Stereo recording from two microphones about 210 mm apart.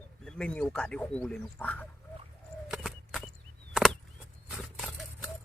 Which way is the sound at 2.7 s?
Centre (ahead or behind).